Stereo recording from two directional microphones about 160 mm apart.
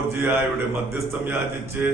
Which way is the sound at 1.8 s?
10° right (ahead or behind).